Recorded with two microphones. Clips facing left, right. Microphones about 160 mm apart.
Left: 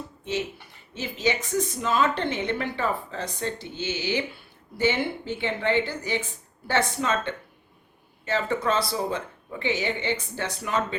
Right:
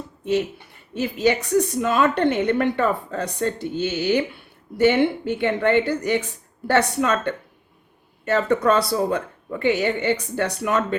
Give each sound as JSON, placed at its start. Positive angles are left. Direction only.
{"t": 0.9, "sound": "a woman's voice", "side_deg": -60}
{"t": 8.2, "sound": "a woman's voice", "side_deg": -65}